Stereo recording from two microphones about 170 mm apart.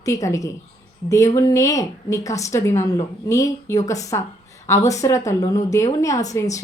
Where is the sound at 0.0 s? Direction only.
20° left (ahead or behind).